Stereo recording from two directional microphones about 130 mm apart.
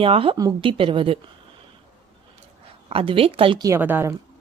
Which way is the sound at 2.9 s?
45° right (ahead or behind).